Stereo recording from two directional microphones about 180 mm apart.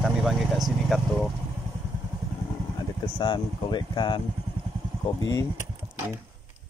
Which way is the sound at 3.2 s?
25° left (ahead or behind).